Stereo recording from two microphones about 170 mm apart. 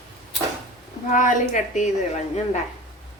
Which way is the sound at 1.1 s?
50° left (ahead or behind).